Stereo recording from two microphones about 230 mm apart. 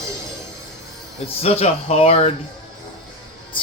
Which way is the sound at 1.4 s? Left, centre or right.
Left.